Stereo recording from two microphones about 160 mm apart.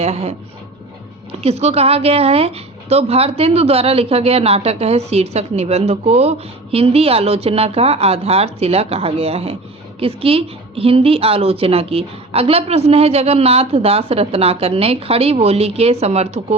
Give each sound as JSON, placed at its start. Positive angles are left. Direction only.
{"t": 0.0, "sound": "speech", "side_deg": -40}